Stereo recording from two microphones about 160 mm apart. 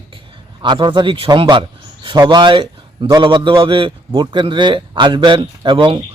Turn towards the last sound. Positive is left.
turn(degrees=-30)  # may be behind; listen again after turning